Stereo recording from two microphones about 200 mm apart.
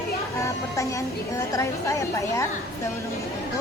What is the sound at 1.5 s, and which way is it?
Speech, 15° left (ahead or behind).